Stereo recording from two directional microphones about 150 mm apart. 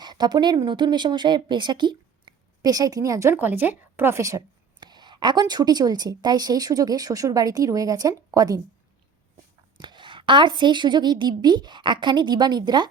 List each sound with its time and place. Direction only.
0.0 s speech: 30° right (ahead or behind)
9.7 s a woman's voice: 30° right (ahead or behind)